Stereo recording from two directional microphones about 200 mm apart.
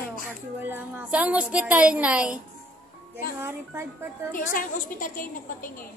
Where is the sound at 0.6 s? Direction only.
10° right (ahead or behind).